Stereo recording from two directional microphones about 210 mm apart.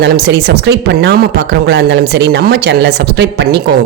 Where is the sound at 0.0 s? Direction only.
50° right (ahead or behind).